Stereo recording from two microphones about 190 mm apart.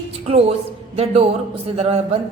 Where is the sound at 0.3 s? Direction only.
30° right (ahead or behind).